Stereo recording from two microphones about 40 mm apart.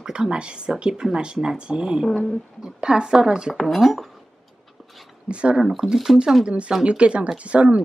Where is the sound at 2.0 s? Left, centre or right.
Centre.